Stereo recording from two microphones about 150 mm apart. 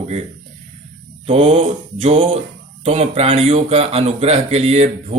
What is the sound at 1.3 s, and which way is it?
Speech, 45° right (ahead or behind).